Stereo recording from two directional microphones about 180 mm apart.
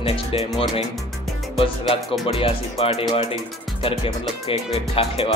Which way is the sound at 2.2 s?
30° left (ahead or behind).